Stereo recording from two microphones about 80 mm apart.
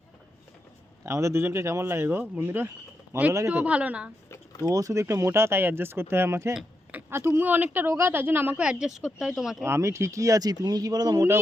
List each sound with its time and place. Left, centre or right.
1.0 s speech: right
3.1 s speech: right
3.5 s a woman's voice: centre
4.6 s speech: right
6.9 s a sound: right
7.3 s a woman's voice: right
8.6 s speech: centre
9.6 s speech: right